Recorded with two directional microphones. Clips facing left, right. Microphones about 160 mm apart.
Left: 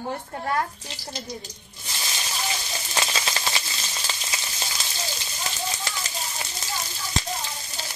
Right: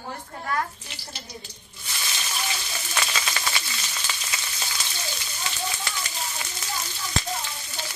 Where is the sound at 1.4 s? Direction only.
30° left (ahead or behind).